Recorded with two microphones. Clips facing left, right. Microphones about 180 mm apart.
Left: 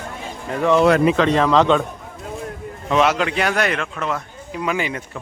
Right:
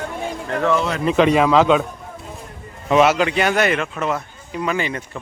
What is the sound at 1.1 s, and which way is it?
Speech, 10° right (ahead or behind).